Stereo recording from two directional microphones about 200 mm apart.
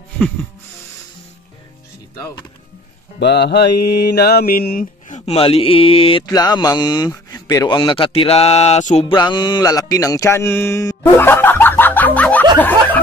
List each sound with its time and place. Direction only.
3.2 s mantra: 55° left (ahead or behind)
5.2 s mantra: 30° left (ahead or behind)
9.1 s music: 20° left (ahead or behind)